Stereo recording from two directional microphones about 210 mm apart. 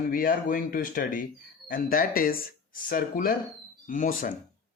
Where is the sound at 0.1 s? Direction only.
40° left (ahead or behind).